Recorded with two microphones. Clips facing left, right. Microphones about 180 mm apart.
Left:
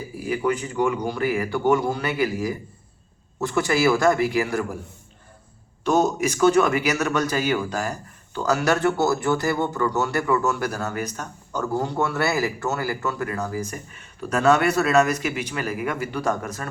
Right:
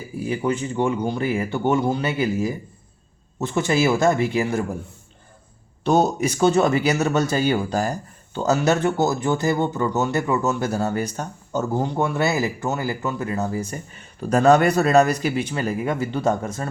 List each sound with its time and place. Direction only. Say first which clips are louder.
0.3 s speech: even; 25° right (ahead or behind)
5.8 s speech: right 2 dB; 30° right (ahead or behind)